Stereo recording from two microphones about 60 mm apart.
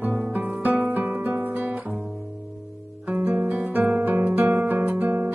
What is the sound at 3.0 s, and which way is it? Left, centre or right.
Music, right.